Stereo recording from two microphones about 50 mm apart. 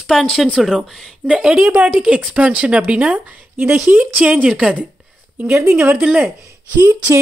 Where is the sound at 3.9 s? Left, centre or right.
Right.